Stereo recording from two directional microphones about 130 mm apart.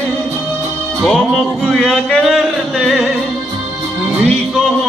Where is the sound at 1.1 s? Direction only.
Centre (ahead or behind).